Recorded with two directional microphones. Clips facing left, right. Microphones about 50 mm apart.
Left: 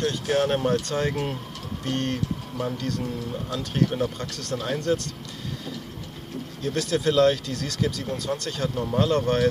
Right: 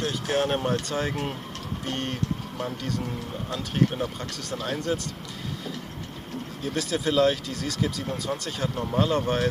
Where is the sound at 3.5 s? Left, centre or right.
Centre.